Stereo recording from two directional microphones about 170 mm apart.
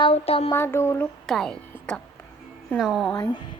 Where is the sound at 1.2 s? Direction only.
Centre (ahead or behind).